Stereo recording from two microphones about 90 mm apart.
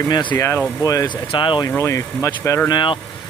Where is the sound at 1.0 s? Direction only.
60° left (ahead or behind).